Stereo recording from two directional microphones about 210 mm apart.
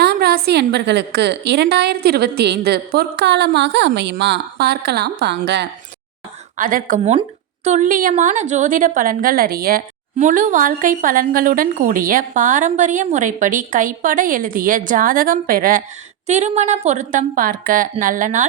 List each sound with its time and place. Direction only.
0.0 s a woman's voice: 50° right (ahead or behind)
6.6 s a woman's voice: 40° right (ahead or behind)